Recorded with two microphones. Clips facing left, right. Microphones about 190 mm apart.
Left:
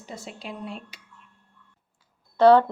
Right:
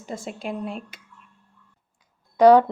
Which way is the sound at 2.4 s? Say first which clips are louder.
Right 2 dB; 10° right (ahead or behind).